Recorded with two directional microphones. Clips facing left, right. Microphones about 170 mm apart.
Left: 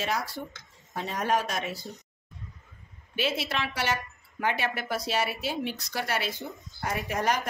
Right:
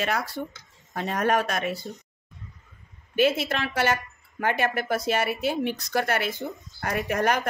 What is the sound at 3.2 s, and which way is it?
A woman's voice, 50° right (ahead or behind).